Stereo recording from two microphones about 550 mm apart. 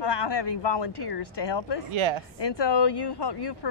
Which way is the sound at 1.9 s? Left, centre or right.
Right.